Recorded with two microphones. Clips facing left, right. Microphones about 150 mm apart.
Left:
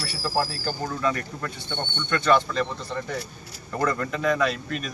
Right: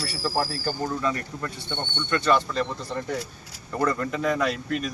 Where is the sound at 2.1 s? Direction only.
5° right (ahead or behind).